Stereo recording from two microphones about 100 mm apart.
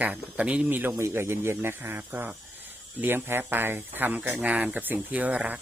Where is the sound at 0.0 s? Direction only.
15° right (ahead or behind).